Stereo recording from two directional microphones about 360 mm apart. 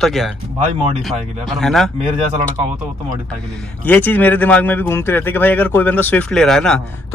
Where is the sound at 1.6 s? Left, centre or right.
Centre.